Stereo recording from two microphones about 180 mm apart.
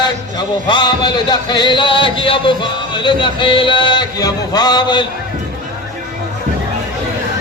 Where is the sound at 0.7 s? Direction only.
25° left (ahead or behind).